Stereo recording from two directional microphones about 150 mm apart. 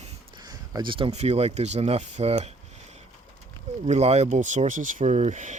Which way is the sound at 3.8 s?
45° right (ahead or behind).